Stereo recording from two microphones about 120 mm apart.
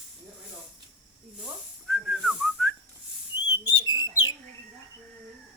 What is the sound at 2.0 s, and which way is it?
Whistling, centre (ahead or behind).